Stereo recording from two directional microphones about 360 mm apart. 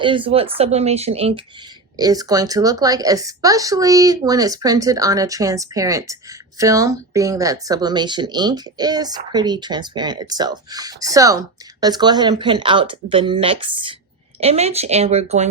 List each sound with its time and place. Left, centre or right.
0.0 s speech: centre